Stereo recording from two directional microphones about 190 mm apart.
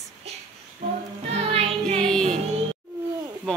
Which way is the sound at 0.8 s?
35° right (ahead or behind).